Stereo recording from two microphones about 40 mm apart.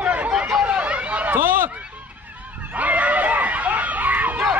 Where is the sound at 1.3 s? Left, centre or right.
Right.